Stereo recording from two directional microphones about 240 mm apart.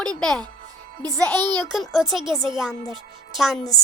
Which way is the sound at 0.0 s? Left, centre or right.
Centre.